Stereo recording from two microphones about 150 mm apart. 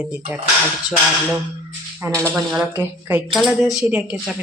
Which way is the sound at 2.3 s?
5° right (ahead or behind).